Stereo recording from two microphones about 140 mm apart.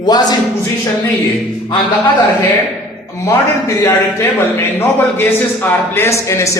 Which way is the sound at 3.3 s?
20° left (ahead or behind).